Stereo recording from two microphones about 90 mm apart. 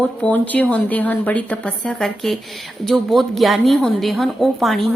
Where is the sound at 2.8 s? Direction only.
Centre (ahead or behind).